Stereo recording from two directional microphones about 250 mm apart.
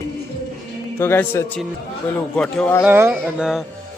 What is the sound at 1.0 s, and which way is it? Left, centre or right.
A man's voice, centre.